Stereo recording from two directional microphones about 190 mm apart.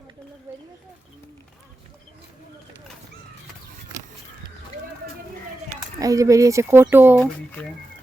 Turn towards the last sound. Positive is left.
turn(degrees=5)  # may be behind; listen again after turning